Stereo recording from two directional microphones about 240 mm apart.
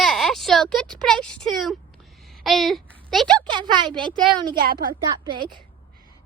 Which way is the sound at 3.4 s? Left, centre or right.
Centre.